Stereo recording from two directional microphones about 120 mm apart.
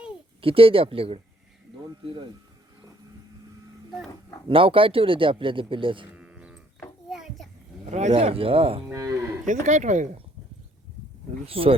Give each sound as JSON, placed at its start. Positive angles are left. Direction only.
{"t": 0.4, "sound": "speech", "side_deg": -50}
{"t": 4.4, "sound": "speech", "side_deg": -50}
{"t": 6.1, "sound": "sheep", "side_deg": -10}
{"t": 7.1, "sound": "children playing", "side_deg": -5}
{"t": 7.9, "sound": "speech", "side_deg": -65}
{"t": 8.9, "sound": "cattle", "side_deg": -25}
{"t": 9.5, "sound": "speech", "side_deg": -85}
{"t": 11.4, "sound": "speech", "side_deg": -50}